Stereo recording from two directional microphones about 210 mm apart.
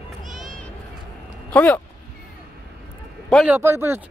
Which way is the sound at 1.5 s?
5° left (ahead or behind).